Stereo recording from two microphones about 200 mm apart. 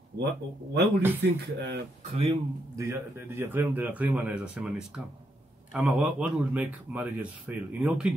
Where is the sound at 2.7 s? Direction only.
15° right (ahead or behind).